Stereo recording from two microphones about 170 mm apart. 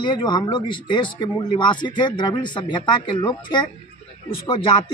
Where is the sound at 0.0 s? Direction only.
25° left (ahead or behind).